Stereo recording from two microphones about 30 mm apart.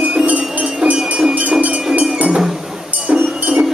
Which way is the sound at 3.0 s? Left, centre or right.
Right.